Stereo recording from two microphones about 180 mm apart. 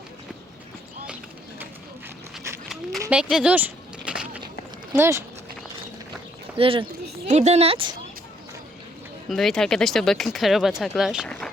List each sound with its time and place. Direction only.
3.1 s speech: 5° right (ahead or behind)
6.6 s speech: 30° right (ahead or behind)
9.3 s speech: centre (ahead or behind)